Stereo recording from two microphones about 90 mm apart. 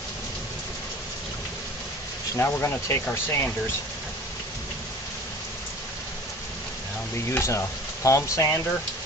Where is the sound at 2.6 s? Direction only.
30° left (ahead or behind).